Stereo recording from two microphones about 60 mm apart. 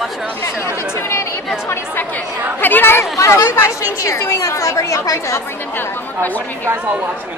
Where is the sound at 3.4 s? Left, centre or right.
Left.